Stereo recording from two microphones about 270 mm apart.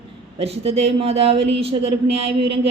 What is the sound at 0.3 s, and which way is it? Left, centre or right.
Speech, right.